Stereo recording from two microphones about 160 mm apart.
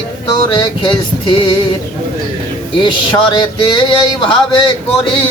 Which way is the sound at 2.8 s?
30° left (ahead or behind).